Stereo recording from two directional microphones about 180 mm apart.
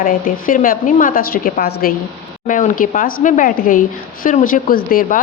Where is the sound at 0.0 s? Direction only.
50° left (ahead or behind).